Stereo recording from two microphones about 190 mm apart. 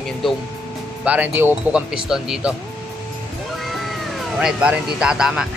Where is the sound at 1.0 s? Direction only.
10° right (ahead or behind).